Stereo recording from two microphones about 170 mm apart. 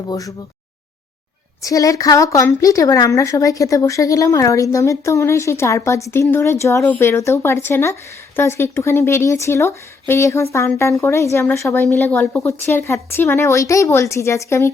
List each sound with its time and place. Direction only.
0.1 s a woman's voice: 20° left (ahead or behind)
1.6 s a woman's voice: 20° left (ahead or behind)